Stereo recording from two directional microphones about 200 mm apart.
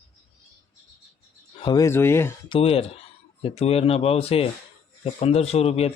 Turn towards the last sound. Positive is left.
turn(degrees=30)  # may be behind; listen again after turning